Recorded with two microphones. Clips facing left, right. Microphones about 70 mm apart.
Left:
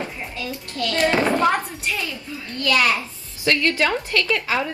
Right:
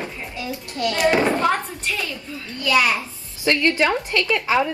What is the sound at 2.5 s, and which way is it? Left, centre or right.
Speech, centre.